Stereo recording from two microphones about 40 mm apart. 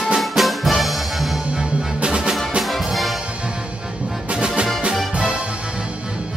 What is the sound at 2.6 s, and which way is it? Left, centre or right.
Music, centre.